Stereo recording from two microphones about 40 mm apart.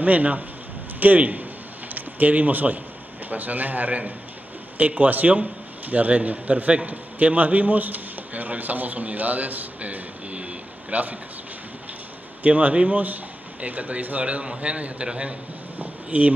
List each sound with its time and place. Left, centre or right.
0.0 s a man's voice: right
12.4 s a man's voice: right
15.8 s a sound: right